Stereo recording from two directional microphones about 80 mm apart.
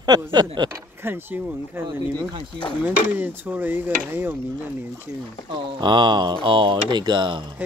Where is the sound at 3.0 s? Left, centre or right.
Right.